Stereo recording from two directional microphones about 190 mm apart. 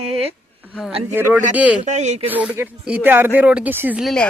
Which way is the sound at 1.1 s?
10° right (ahead or behind).